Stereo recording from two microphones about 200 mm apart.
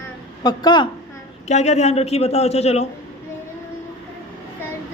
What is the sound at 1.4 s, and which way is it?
A man's voice, 35° left (ahead or behind).